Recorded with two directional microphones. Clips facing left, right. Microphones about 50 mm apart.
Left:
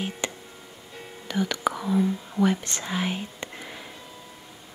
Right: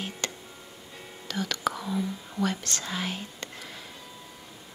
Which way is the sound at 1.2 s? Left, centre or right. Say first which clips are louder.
Left 4 dB; centre.